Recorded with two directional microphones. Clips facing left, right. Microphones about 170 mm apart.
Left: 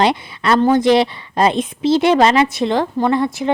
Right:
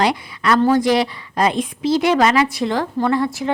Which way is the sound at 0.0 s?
25° left (ahead or behind).